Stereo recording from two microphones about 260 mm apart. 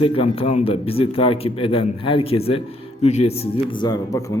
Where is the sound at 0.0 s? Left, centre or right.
Left.